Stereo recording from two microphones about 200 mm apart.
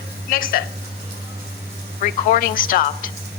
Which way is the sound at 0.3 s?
45° left (ahead or behind).